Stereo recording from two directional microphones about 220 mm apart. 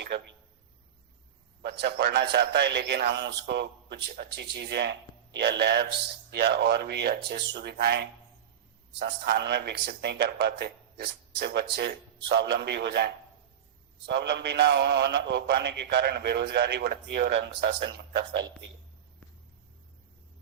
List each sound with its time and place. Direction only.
1.8 s a man's voice: 50° right (ahead or behind)
14.1 s a man's voice: 50° right (ahead or behind)